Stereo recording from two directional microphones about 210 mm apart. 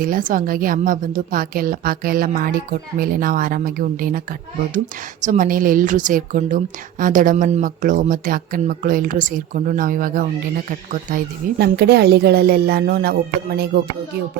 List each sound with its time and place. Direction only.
0.0 s speech: 40° right (ahead or behind)
5.2 s speech: 40° right (ahead or behind)